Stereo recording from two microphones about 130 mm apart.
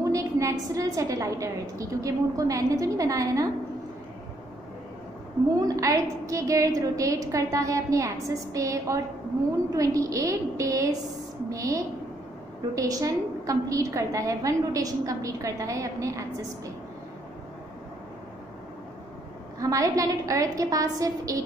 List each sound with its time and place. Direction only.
0.0 s a woman's voice: 25° right (ahead or behind)
5.6 s a woman's voice: 25° right (ahead or behind)
19.6 s a woman's voice: 25° right (ahead or behind)